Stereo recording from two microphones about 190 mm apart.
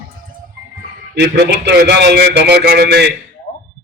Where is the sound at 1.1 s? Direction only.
55° right (ahead or behind).